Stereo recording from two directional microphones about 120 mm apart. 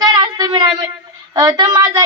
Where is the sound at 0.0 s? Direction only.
35° right (ahead or behind).